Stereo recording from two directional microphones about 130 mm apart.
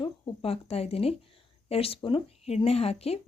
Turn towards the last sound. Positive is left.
turn(degrees=50)  # may be behind; listen again after turning